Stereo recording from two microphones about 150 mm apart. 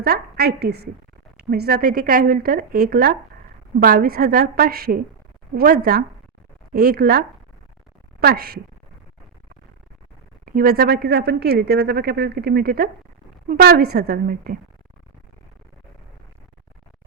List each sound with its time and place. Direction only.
0.0 s a woman's voice: 90° right
10.4 s a woman's voice: 80° right